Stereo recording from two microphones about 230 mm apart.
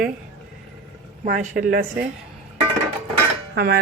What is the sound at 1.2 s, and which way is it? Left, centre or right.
Speech, right.